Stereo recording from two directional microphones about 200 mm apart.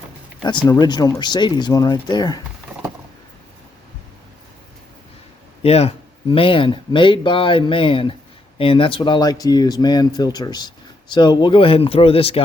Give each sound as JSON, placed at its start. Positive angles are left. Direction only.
{"t": 0.4, "sound": "speech", "side_deg": 20}
{"t": 5.6, "sound": "speech", "side_deg": 30}